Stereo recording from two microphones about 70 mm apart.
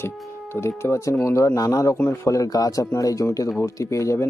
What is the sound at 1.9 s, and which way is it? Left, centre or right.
Speech, left.